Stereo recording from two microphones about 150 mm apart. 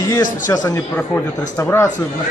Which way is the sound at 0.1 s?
25° left (ahead or behind).